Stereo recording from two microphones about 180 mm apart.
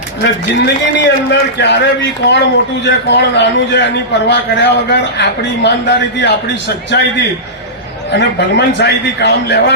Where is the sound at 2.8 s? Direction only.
70° left (ahead or behind).